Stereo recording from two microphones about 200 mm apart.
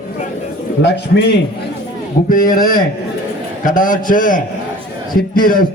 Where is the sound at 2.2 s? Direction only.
45° left (ahead or behind).